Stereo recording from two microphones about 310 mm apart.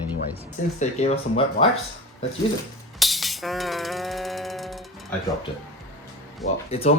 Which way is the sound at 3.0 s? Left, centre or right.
Centre.